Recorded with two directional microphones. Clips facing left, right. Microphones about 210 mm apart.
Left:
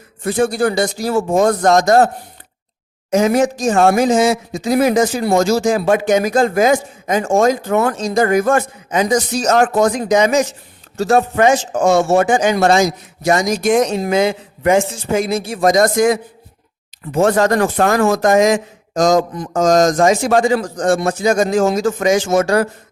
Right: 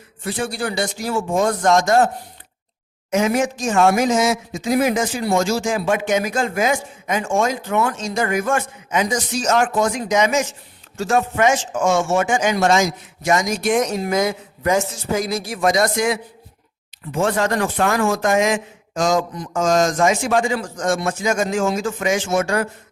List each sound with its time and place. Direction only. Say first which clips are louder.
0.2 s speech: left 9 dB; 45° left (ahead or behind)
3.1 s speech: left 5 dB; 35° left (ahead or behind)
15.6 s a man's voice: left 6 dB; 45° left (ahead or behind)